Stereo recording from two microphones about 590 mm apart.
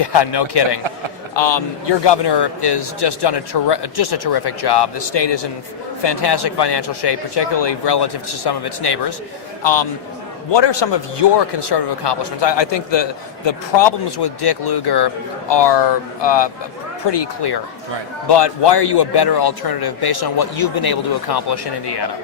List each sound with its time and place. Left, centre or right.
0.0 s a man's voice: left
10.5 s a man's voice: left